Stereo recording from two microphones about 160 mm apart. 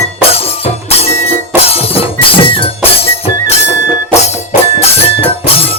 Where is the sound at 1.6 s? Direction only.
40° left (ahead or behind).